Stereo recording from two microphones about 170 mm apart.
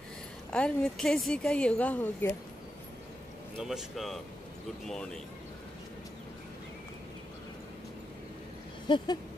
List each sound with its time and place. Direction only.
0.5 s a woman's voice: 5° left (ahead or behind)
3.5 s a woman's voice: centre (ahead or behind)
8.8 s a sound: 25° left (ahead or behind)